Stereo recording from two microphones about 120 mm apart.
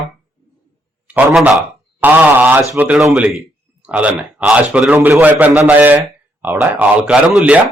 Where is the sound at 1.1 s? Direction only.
10° right (ahead or behind).